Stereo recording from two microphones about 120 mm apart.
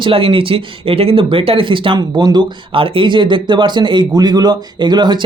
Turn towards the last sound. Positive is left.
turn(degrees=-35)  # may be behind; listen again after turning